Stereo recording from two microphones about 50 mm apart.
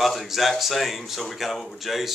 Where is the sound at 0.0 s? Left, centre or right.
Centre.